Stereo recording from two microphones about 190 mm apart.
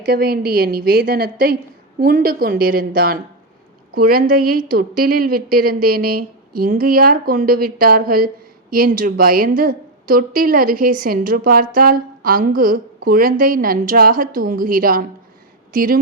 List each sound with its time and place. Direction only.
0.1 s a woman's voice: 55° right (ahead or behind)